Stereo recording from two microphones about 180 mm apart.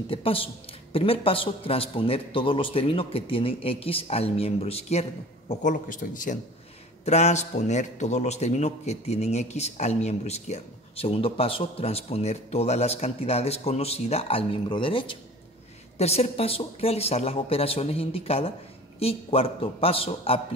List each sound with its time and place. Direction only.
0.1 s a man's voice: 30° left (ahead or behind)